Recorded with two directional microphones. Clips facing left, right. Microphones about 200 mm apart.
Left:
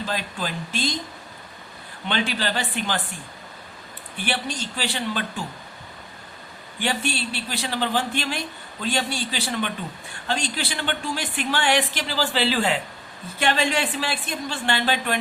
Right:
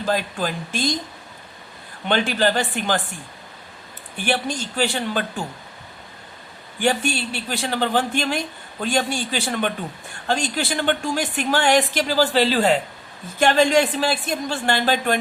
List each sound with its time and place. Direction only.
0.0 s a woman's voice: 50° right (ahead or behind)
2.0 s a woman's voice: 45° right (ahead or behind)
4.3 s a woman's voice: 45° right (ahead or behind)
6.7 s a woman's voice: 45° right (ahead or behind)